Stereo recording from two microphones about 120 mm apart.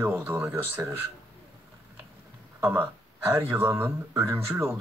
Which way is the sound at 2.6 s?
15° right (ahead or behind).